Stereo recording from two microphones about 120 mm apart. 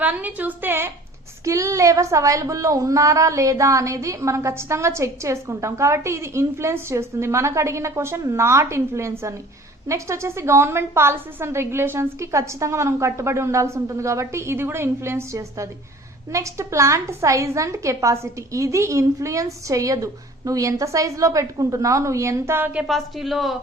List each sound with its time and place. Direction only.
0.0 s a woman's voice: 15° right (ahead or behind)
22.9 s speech: centre (ahead or behind)